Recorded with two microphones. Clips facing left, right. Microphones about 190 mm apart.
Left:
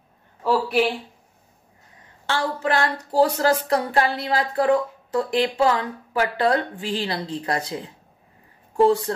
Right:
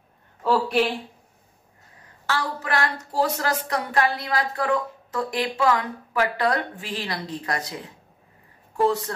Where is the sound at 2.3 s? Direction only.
30° left (ahead or behind).